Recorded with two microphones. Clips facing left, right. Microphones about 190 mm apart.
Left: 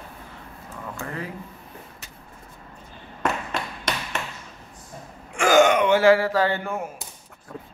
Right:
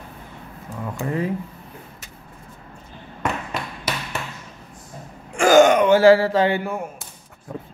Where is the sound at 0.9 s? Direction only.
20° right (ahead or behind).